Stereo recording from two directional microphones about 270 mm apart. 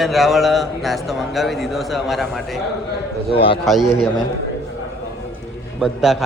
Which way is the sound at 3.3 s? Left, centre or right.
Centre.